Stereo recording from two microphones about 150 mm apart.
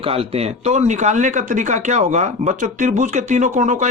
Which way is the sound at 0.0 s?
40° right (ahead or behind).